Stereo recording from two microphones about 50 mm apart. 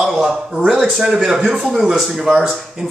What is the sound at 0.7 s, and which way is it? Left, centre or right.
Speech, centre.